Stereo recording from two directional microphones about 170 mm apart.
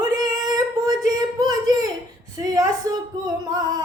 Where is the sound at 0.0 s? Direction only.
20° right (ahead or behind).